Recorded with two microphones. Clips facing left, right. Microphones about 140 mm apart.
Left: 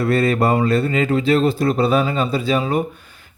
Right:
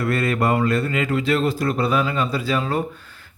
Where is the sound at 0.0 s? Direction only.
30° left (ahead or behind).